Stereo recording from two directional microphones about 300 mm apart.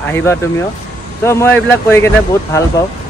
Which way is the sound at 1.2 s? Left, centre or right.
Centre.